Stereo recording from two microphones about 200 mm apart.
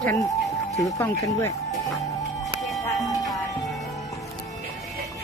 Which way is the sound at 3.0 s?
20° left (ahead or behind).